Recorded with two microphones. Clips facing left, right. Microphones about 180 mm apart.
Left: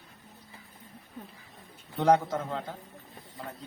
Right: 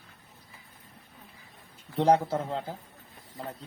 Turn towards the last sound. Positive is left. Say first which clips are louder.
# right 2 dB
turn(degrees=-30)  # may be behind; listen again after turning